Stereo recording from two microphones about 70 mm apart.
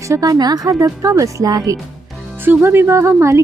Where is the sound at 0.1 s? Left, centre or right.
Right.